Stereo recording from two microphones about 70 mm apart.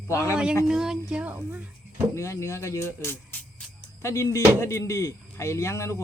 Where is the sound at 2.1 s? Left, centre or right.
Left.